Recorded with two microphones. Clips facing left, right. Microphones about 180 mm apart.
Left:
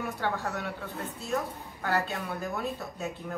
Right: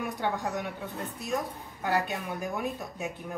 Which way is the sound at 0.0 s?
15° right (ahead or behind).